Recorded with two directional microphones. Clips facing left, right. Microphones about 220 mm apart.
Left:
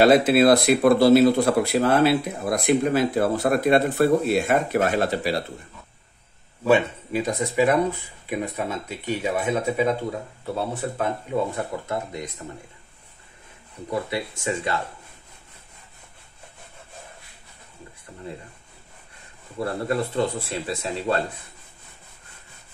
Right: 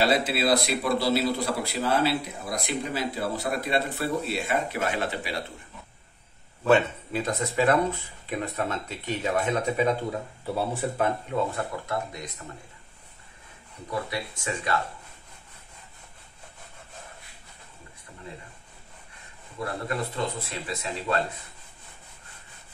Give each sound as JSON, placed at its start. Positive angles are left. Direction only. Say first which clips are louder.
{"t": 0.0, "sound": "speech", "louder": "left 9 dB", "side_deg": 50}
{"t": 6.6, "sound": "speech", "louder": "left 2 dB", "side_deg": 10}
{"t": 11.5, "sound": "speech", "louder": "left 2 dB", "side_deg": 25}
{"t": 13.8, "sound": "speech", "louder": "left 4 dB", "side_deg": 25}
{"t": 19.6, "sound": "speech", "louder": "left 6 dB", "side_deg": 30}